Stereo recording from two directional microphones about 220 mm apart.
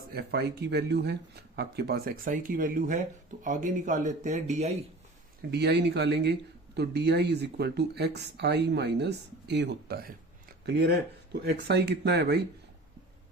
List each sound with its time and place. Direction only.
0.1 s speech: 45° right (ahead or behind); by 4.7 s 30° right (ahead or behind)
5.5 s speech: 50° right (ahead or behind)